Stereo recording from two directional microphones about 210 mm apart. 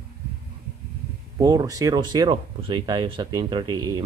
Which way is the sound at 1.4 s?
15° right (ahead or behind).